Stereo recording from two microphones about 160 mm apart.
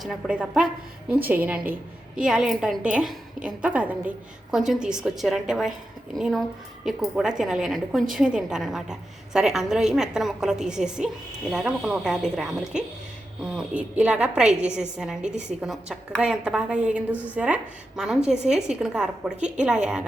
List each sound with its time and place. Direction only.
0.0 s a woman's voice: 5° right (ahead or behind)